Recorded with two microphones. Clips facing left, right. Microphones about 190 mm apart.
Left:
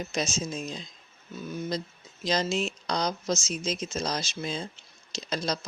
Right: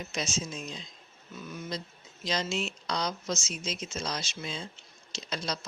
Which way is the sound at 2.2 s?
40° left (ahead or behind).